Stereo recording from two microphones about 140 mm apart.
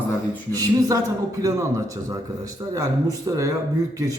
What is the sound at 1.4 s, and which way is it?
A man's voice, 25° right (ahead or behind).